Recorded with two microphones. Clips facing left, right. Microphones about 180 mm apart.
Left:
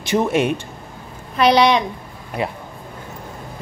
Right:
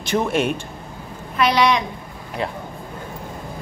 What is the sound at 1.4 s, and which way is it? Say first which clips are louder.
Speech: left 3 dB; 30° left (ahead or behind).